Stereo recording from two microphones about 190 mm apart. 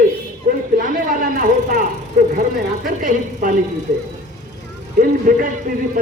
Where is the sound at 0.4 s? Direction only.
50° right (ahead or behind).